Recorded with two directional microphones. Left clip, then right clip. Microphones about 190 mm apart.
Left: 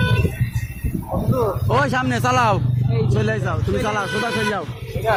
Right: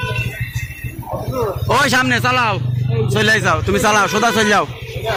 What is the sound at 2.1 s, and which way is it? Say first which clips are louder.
Speech: right 2 dB; 15° left (ahead or behind).